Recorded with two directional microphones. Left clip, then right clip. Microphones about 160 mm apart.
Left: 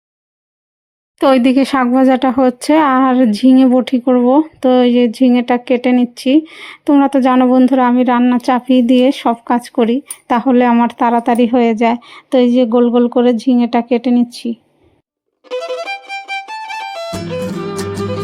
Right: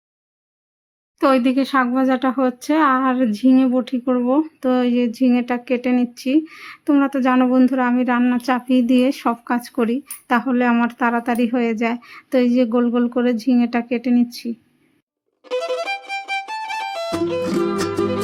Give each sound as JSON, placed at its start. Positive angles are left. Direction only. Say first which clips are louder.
{"t": 1.2, "sound": "speech", "louder": "left 6 dB", "side_deg": 35}
{"t": 15.4, "sound": "music", "louder": "left 2 dB", "side_deg": 0}